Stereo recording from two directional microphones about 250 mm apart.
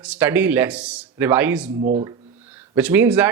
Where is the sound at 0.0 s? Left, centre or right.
Centre.